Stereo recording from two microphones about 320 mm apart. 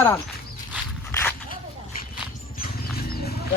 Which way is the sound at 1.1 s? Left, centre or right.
Centre.